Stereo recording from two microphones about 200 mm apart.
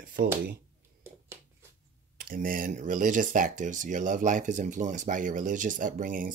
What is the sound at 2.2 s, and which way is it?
Speech, 45° right (ahead or behind).